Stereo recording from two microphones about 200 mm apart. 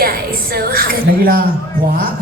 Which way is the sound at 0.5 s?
45° right (ahead or behind).